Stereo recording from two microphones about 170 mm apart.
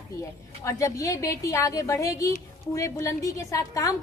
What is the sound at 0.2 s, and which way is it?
A woman's voice, 20° left (ahead or behind).